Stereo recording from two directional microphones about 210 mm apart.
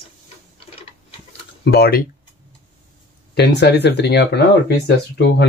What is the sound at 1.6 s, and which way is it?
Speech, 50° left (ahead or behind).